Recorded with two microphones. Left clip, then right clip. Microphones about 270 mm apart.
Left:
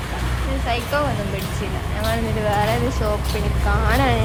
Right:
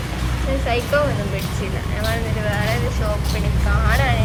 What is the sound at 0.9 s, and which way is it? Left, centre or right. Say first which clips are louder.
Speech: right 3 dB; centre.